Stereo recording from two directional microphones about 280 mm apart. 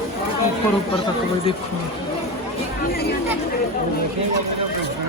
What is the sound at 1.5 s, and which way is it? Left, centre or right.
Speech, centre.